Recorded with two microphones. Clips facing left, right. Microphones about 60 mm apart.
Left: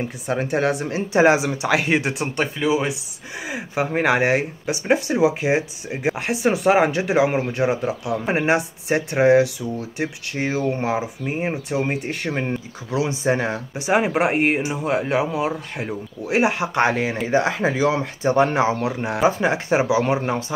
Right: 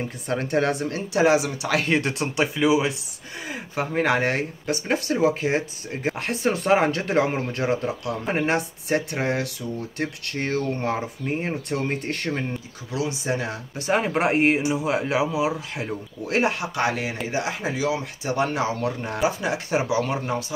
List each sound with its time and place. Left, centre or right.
0.3 s speech: centre
0.8 s speech: left
1.9 s speech: centre
3.4 s speech: centre
12.4 s speech: left
13.7 s speech: centre
16.5 s speech: left